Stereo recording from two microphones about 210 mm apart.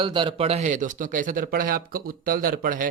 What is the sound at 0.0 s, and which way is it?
A man's voice, 25° right (ahead or behind).